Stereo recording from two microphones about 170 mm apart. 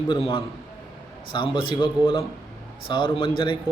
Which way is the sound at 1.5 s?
30° left (ahead or behind).